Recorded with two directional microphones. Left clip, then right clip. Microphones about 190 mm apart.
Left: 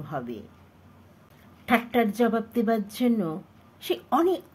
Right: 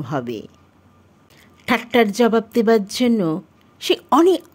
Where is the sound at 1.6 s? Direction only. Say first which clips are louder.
Right 7 dB; 55° right (ahead or behind).